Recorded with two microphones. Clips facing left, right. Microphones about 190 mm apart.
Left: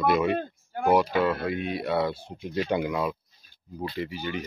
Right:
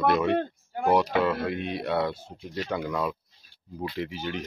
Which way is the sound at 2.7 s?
10° left (ahead or behind).